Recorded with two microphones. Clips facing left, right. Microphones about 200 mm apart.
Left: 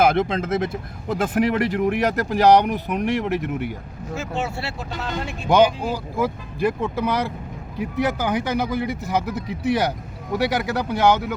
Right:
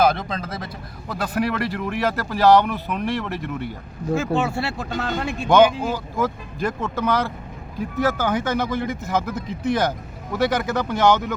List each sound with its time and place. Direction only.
0.0 s speech: 25° left (ahead or behind)
4.1 s speech: 55° right (ahead or behind)
5.5 s speech: 10° left (ahead or behind)
9.3 s speech: 65° left (ahead or behind)
10.3 s speech: 10° left (ahead or behind)